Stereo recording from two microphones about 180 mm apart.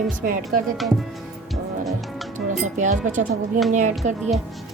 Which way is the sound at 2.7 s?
45° right (ahead or behind).